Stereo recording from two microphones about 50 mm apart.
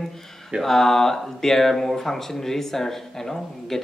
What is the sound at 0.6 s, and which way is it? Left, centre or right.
Speech, centre.